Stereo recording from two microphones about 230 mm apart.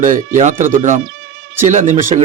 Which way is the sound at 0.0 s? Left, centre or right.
Right.